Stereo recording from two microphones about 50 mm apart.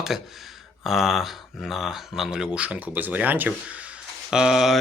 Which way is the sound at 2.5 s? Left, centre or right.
Right.